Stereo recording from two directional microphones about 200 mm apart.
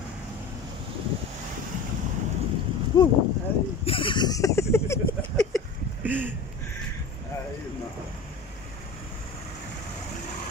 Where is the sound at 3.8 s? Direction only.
25° left (ahead or behind).